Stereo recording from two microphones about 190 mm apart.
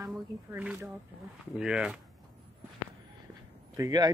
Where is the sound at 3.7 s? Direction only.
20° right (ahead or behind).